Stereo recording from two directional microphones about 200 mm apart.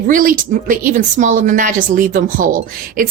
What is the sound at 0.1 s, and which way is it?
Speech, 45° right (ahead or behind).